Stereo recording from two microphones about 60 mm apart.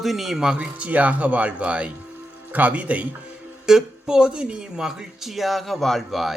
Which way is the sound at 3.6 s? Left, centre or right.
Centre.